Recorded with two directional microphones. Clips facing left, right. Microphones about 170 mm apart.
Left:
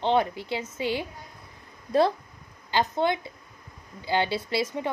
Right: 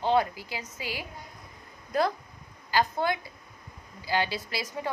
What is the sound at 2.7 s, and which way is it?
A woman's voice, 25° left (ahead or behind).